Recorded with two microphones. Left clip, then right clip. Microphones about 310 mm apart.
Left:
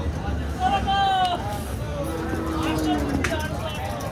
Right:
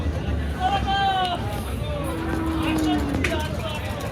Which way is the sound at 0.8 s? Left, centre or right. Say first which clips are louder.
Left 1 dB; left.